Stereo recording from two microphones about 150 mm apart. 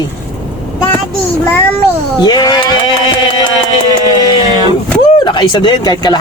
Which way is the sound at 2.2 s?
25° left (ahead or behind).